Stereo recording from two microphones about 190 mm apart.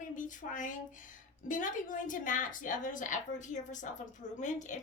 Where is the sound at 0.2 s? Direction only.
45° left (ahead or behind).